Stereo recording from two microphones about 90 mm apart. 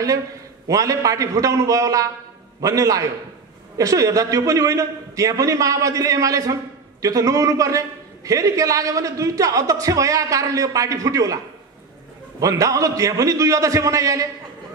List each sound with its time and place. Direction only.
0.7 s a man's voice: 40° right (ahead or behind)
12.4 s a man's voice: 40° right (ahead or behind)